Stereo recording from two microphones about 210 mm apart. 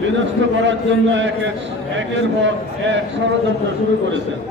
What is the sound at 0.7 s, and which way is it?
Speech, 60° right (ahead or behind).